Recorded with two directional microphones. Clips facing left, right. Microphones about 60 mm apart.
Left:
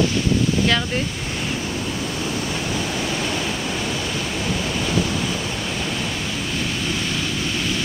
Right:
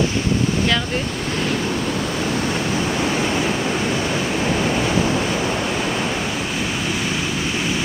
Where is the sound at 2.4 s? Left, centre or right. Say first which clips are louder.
Right 4 dB; right.